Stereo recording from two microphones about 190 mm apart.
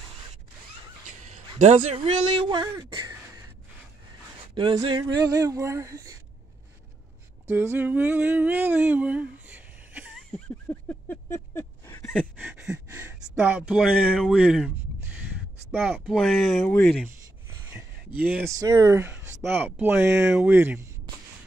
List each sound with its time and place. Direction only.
1.9 s speech: 30° right (ahead or behind)
2.6 s speech: 20° right (ahead or behind)
4.6 s speech: 25° right (ahead or behind)
7.4 s a sound: 10° right (ahead or behind)
10.3 s a sound: 10° left (ahead or behind)
12.5 s speech: 5° right (ahead or behind)
15.7 s speech: 5° right (ahead or behind)
18.6 s speech: 20° right (ahead or behind)